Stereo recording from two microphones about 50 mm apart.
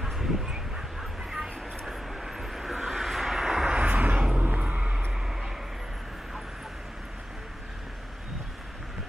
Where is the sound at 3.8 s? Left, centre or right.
Right.